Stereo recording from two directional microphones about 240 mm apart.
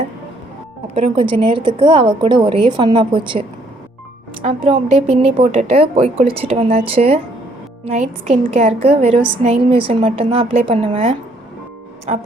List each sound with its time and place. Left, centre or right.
0.9 s a woman's voice: right
4.4 s a woman's voice: right